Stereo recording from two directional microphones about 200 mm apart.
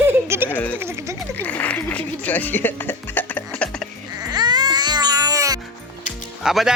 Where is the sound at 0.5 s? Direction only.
10° left (ahead or behind).